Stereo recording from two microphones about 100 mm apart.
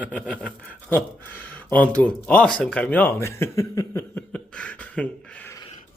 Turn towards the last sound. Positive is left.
turn(degrees=15)  # may be behind; listen again after turning